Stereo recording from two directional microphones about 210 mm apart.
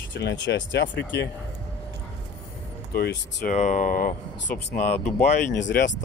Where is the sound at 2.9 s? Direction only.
45° left (ahead or behind).